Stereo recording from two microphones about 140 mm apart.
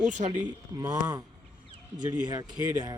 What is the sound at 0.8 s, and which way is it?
Speech, 30° right (ahead or behind).